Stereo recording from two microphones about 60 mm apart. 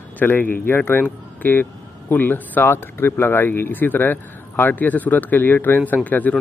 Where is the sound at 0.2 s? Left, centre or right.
Left.